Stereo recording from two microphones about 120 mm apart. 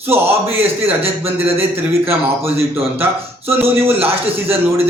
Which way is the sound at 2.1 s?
20° right (ahead or behind).